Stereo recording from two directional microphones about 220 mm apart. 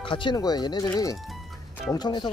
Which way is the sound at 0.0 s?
20° left (ahead or behind).